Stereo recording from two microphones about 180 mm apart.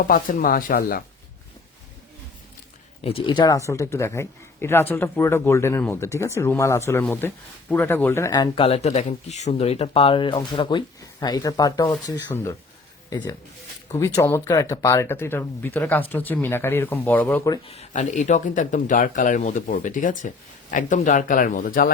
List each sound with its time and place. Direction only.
0.1 s speech: 50° left (ahead or behind)
3.0 s speech: 35° left (ahead or behind); by 17.5 s 10° left (ahead or behind)
17.7 s speech: 40° left (ahead or behind)